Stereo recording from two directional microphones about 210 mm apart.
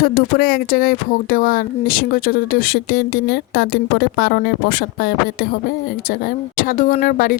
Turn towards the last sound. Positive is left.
turn(degrees=40)  # may be behind; listen again after turning